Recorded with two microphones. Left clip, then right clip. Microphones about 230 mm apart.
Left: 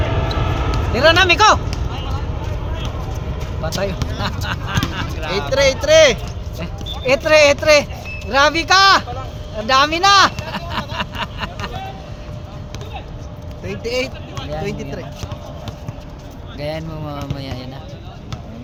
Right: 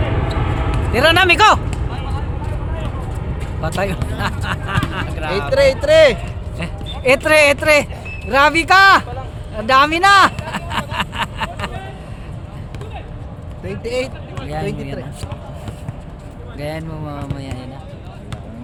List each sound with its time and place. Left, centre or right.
0.1 s a sound: left
0.9 s speech: right
3.6 s speech: right
4.4 s a sound: right
5.5 s speech: centre
6.6 s speech: right
10.4 s a sound: right
13.7 s speech: centre
16.6 s speech: centre
17.1 s music: centre